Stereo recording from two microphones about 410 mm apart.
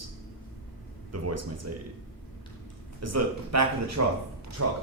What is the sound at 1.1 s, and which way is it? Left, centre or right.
Speech, right.